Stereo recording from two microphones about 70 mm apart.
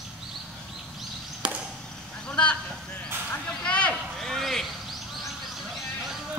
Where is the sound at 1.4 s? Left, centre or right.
Centre.